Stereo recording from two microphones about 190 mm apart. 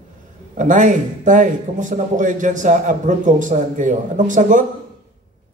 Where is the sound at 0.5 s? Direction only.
40° right (ahead or behind).